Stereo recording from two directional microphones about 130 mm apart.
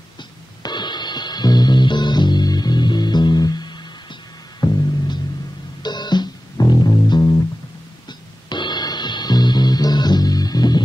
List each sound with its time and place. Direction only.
0.6 s music: 35° left (ahead or behind)